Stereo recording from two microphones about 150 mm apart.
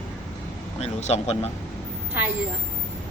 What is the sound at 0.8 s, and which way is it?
Speech, 45° left (ahead or behind).